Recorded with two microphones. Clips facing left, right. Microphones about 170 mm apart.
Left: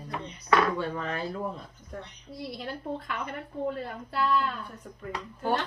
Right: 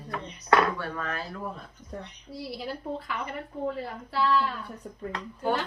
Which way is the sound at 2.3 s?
5° right (ahead or behind).